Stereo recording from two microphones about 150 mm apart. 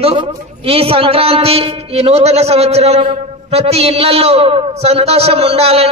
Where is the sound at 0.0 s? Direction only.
40° right (ahead or behind).